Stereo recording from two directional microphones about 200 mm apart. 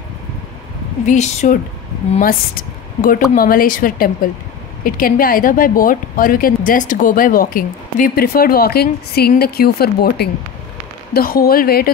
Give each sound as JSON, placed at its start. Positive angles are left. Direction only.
{"t": 1.0, "sound": "a woman's voice", "side_deg": 35}